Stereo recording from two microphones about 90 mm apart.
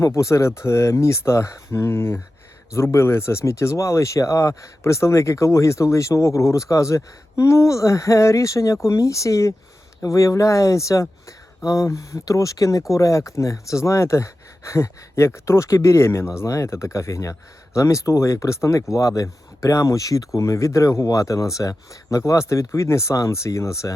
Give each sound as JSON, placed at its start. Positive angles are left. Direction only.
{"t": 0.2, "sound": "speech", "side_deg": 35}